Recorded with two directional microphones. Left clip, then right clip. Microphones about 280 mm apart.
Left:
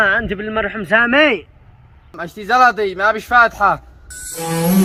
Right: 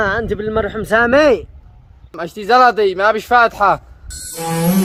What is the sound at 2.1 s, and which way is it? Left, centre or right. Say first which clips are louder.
Speech: right 2 dB; right.